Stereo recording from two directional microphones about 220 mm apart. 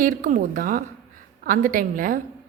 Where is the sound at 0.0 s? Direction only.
35° right (ahead or behind).